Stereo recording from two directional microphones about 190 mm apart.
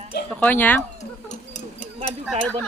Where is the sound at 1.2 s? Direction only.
40° left (ahead or behind).